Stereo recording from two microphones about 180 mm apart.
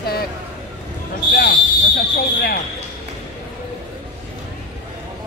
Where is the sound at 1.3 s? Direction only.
50° left (ahead or behind).